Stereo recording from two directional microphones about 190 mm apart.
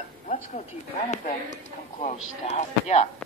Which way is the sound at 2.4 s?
35° left (ahead or behind).